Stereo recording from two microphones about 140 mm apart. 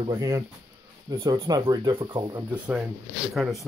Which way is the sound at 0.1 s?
20° right (ahead or behind).